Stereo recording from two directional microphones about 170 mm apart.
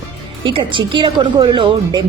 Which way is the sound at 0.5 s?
30° right (ahead or behind).